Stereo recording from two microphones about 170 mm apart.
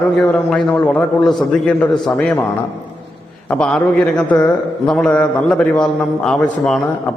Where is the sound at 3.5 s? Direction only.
5° left (ahead or behind).